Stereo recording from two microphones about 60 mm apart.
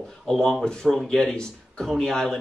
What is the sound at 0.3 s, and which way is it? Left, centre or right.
Speech, centre.